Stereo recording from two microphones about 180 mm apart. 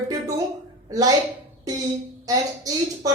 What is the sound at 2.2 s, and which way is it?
Speech, 20° right (ahead or behind).